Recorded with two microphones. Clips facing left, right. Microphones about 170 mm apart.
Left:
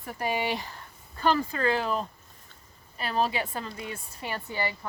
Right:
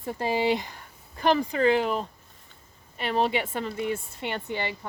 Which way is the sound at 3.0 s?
25° right (ahead or behind).